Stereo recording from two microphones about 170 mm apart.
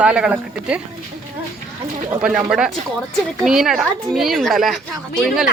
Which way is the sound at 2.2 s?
5° right (ahead or behind).